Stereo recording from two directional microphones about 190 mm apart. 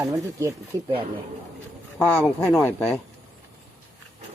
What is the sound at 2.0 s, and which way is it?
Speech, 10° left (ahead or behind).